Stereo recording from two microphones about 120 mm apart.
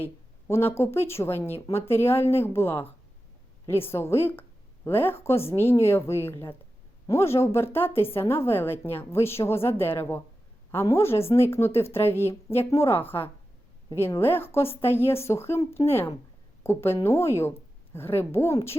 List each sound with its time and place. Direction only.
0.0 s a woman's voice: 20° left (ahead or behind)